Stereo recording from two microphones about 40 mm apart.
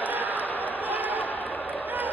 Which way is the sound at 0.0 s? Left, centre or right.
Right.